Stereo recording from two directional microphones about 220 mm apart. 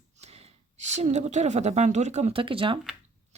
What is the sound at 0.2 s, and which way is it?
Speech, 30° right (ahead or behind).